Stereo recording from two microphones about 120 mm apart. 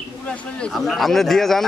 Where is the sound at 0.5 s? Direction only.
5° left (ahead or behind).